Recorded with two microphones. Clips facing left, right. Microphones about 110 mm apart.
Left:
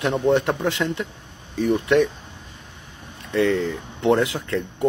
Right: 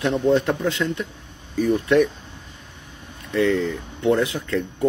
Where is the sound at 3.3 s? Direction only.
30° left (ahead or behind).